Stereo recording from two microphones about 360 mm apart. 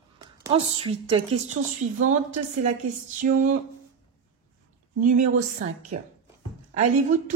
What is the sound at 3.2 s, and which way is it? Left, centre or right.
Speech, right.